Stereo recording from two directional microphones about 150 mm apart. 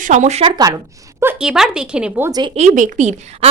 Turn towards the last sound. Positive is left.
turn(degrees=-55)  # may be behind; listen again after turning